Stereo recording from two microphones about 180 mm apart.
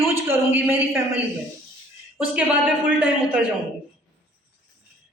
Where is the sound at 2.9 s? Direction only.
10° right (ahead or behind).